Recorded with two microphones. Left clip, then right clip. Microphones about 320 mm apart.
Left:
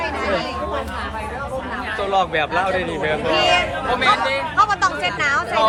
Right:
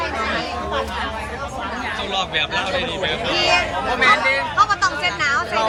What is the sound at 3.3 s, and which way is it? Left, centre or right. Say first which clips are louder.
Chatter: left 1 dB; left.